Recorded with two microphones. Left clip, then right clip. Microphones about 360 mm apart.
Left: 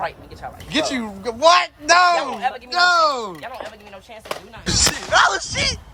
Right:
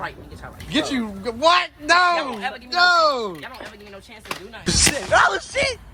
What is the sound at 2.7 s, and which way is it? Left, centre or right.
Speech, centre.